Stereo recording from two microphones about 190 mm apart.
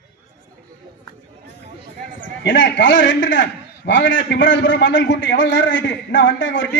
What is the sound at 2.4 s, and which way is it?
A man's voice, 70° left (ahead or behind).